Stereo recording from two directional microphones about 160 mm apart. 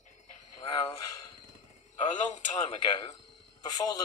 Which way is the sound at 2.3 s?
45° left (ahead or behind).